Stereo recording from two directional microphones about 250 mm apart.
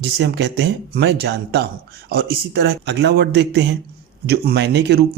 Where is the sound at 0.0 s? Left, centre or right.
Right.